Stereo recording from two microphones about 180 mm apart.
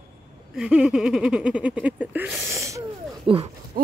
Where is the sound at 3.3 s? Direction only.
30° right (ahead or behind).